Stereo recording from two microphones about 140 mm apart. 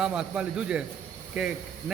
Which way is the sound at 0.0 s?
5° right (ahead or behind).